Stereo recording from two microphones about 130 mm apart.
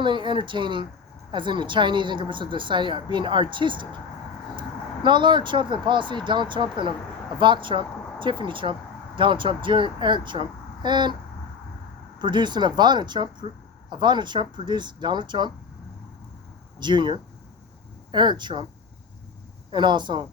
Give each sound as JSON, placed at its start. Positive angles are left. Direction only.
{"t": 0.0, "sound": "speech", "side_deg": -35}
{"t": 5.0, "sound": "speech", "side_deg": -35}
{"t": 12.2, "sound": "speech", "side_deg": -35}
{"t": 16.8, "sound": "speech", "side_deg": -35}
{"t": 19.7, "sound": "speech", "side_deg": -35}